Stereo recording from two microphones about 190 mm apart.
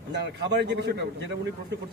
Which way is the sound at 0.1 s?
60° right (ahead or behind).